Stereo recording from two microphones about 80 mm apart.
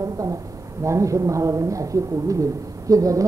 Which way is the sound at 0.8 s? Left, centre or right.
Right.